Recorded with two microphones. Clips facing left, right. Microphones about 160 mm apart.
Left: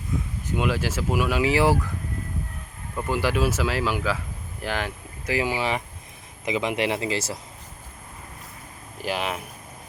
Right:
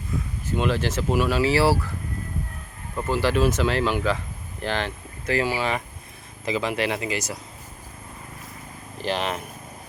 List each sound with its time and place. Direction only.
0.4 s speech: 10° left (ahead or behind)
3.1 s speech: 10° left (ahead or behind); by 7.3 s 25° left (ahead or behind)
9.0 s speech: 5° left (ahead or behind)